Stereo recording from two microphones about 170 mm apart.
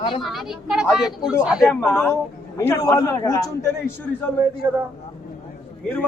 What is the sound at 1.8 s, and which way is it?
A man's voice, 10° left (ahead or behind).